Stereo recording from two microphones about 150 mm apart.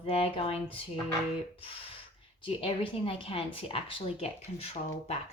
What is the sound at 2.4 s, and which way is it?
Speech, 35° left (ahead or behind).